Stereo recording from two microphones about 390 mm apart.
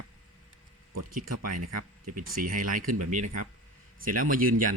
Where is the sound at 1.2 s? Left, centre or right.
Right.